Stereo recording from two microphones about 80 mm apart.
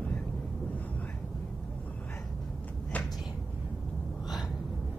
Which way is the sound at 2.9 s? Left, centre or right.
Centre.